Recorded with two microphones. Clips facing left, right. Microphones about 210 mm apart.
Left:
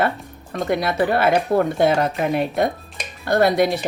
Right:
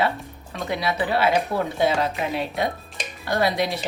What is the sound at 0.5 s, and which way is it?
A woman's voice, 50° left (ahead or behind).